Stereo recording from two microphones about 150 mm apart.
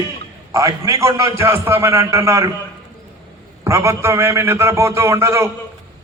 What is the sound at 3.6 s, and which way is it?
A man's voice, 20° right (ahead or behind).